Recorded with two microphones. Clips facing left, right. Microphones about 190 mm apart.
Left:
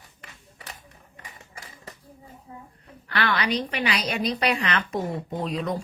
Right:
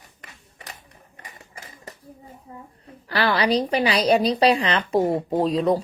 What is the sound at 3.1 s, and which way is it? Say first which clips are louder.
Speech: right 5 dB; 35° right (ahead or behind).